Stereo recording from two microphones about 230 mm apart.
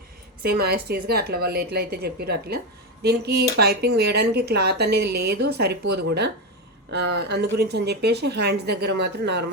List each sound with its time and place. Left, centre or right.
0.4 s speech: right